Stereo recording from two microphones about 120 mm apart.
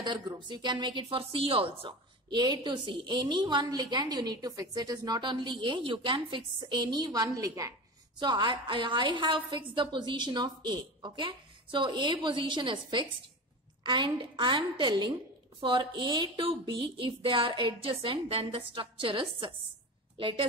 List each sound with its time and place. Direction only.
0.0 s a woman's voice: 40° right (ahead or behind)
8.2 s a woman's voice: 40° right (ahead or behind)